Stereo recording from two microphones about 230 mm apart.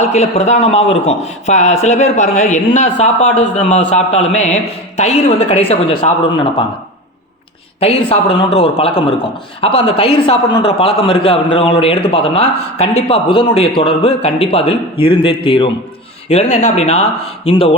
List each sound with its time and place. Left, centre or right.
0.0 s a man's voice: left
7.8 s a man's voice: left